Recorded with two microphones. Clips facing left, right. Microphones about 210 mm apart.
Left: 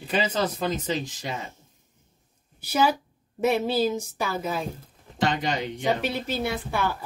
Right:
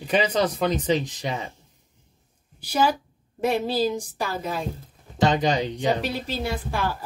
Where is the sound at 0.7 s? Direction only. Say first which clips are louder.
Right 5 dB; 20° right (ahead or behind).